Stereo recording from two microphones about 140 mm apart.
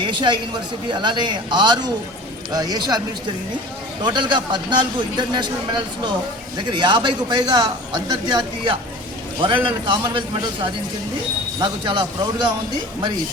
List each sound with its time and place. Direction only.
0.0 s speech: 35° right (ahead or behind)
4.0 s speech: 35° right (ahead or behind)
11.6 s speech: 30° right (ahead or behind)